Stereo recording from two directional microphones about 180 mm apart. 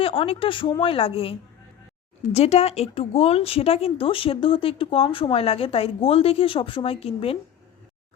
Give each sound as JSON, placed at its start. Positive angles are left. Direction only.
{"t": 0.0, "sound": "speech", "side_deg": 30}